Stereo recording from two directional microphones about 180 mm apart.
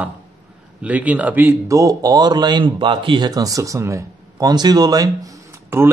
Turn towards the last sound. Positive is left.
turn(degrees=-15)  # may be behind; listen again after turning